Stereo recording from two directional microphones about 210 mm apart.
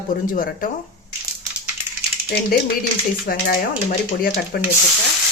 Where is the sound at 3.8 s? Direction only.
45° left (ahead or behind).